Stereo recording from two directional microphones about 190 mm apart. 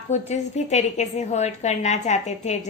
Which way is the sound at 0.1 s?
35° left (ahead or behind).